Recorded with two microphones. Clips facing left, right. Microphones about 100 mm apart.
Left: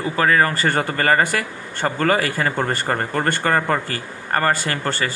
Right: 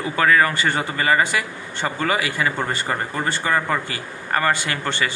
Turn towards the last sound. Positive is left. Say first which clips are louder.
# left 1 dB
turn(degrees=40)  # may be behind; listen again after turning